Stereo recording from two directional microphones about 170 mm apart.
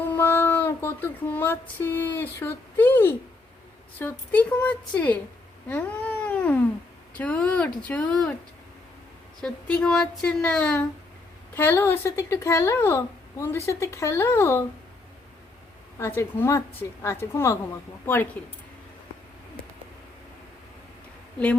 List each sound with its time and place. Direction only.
0.0 s a sound: 10° left (ahead or behind)
3.9 s speech: 10° left (ahead or behind)
5.6 s cat: 10° left (ahead or behind)
7.2 s speech: 5° left (ahead or behind)
9.4 s speech: 5° left (ahead or behind)
16.0 s speech: 15° left (ahead or behind)
21.3 s a woman's voice: 5° left (ahead or behind)